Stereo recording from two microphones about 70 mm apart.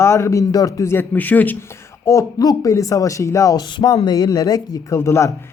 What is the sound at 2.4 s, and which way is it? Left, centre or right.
Speech, left.